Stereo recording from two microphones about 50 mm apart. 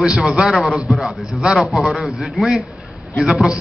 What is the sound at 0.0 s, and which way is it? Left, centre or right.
A man's voice, centre.